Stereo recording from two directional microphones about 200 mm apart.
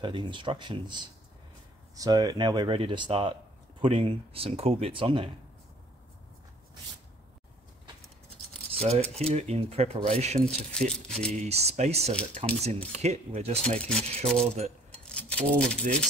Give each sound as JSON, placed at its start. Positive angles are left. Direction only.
{"t": 0.0, "sound": "speech", "side_deg": -25}
{"t": 8.7, "sound": "speech", "side_deg": -30}
{"t": 10.7, "sound": "speech", "side_deg": 5}
{"t": 11.3, "sound": "speech", "side_deg": -30}
{"t": 13.6, "sound": "speech", "side_deg": 5}
{"t": 14.4, "sound": "speech", "side_deg": -35}
{"t": 15.0, "sound": "a sound", "side_deg": 5}